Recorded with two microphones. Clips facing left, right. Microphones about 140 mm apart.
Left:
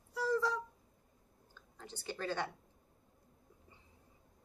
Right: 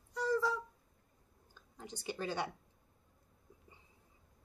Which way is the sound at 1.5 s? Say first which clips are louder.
Right 2 dB; 15° right (ahead or behind).